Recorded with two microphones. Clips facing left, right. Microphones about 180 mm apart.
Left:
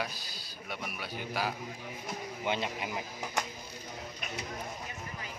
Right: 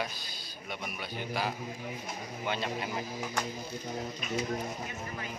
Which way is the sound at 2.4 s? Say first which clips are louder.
Even; 20° left (ahead or behind).